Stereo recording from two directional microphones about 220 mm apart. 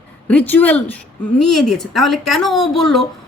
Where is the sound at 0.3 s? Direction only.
5° left (ahead or behind).